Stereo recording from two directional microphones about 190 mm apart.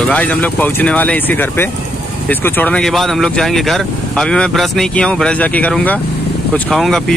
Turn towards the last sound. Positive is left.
turn(degrees=0)  # may be behind; listen again after turning